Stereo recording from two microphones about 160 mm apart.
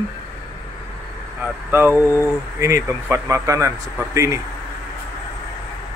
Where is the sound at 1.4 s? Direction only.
15° right (ahead or behind).